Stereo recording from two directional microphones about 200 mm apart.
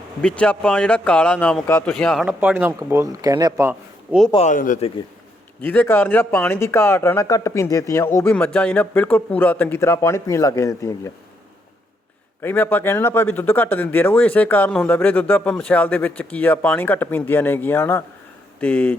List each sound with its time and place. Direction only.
0.2 s speech: 5° left (ahead or behind); by 4.2 s 10° right (ahead or behind)
4.3 s speech: 35° left (ahead or behind)
5.6 s speech: 10° left (ahead or behind)
12.4 s speech: 10° left (ahead or behind)